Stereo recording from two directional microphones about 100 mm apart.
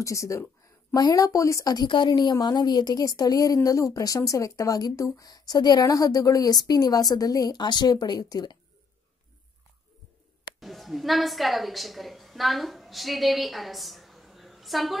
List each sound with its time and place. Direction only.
0.0 s speech: 30° left (ahead or behind)
1.9 s a woman's voice: 50° left (ahead or behind)
10.6 s a woman's voice: centre (ahead or behind)